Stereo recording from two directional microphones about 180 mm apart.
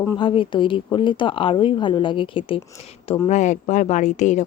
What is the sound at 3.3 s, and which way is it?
Speech, 40° left (ahead or behind).